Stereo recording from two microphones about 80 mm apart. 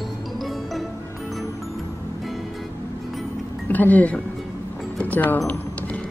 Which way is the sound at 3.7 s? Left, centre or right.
Left.